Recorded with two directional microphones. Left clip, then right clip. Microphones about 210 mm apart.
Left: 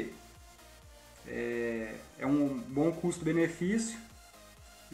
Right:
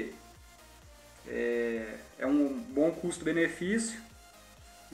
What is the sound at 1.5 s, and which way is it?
Speech, 45° left (ahead or behind).